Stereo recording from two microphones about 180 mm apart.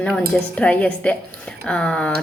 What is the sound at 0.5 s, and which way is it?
Speech, 5° left (ahead or behind).